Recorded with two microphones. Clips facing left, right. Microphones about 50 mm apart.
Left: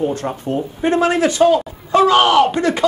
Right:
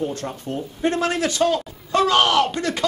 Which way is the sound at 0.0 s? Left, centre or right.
Centre.